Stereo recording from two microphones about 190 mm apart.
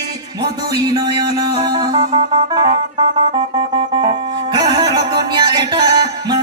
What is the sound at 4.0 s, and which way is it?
Music, 25° right (ahead or behind).